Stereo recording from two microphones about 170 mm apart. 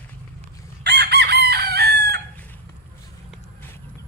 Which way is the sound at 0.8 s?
75° right (ahead or behind).